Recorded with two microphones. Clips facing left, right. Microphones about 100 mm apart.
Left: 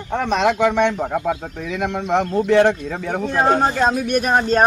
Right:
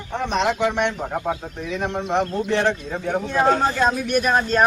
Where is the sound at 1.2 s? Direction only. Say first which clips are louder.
Left 3 dB; 90° left.